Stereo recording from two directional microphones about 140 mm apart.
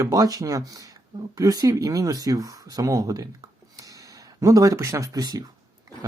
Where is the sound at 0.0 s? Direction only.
25° right (ahead or behind).